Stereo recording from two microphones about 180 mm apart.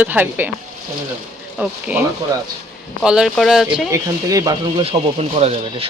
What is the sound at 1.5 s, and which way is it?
Speech, 5° right (ahead or behind).